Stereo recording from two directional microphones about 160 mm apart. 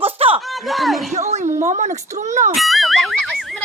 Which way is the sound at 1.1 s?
45° right (ahead or behind).